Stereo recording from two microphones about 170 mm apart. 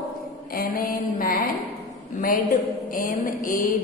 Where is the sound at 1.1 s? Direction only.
55° left (ahead or behind).